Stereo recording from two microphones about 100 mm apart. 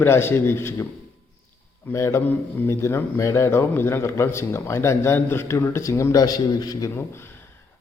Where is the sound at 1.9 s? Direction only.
30° left (ahead or behind).